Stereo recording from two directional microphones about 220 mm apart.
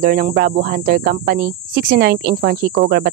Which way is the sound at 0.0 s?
40° right (ahead or behind).